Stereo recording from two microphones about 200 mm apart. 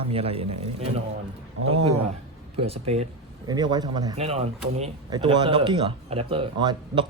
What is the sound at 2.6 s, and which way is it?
Speech, 30° right (ahead or behind).